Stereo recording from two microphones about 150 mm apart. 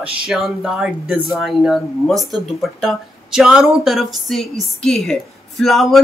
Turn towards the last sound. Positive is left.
turn(degrees=0)  # may be behind; listen again after turning